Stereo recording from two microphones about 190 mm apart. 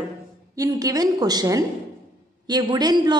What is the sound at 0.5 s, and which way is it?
A woman's voice, 20° right (ahead or behind).